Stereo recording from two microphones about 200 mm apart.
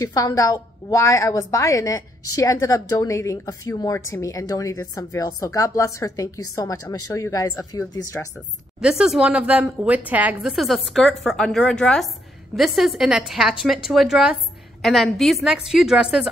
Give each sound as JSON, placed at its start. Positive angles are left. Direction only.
{"t": 0.0, "sound": "a woman's voice", "side_deg": 15}
{"t": 8.8, "sound": "a woman's voice", "side_deg": 0}